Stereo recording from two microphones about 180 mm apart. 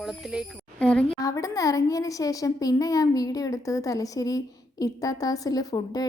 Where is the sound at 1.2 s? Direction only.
20° left (ahead or behind).